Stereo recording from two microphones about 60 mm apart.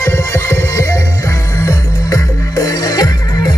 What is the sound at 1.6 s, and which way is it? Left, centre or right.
Music, left.